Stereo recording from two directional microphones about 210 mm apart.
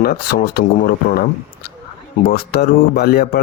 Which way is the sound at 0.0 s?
45° left (ahead or behind).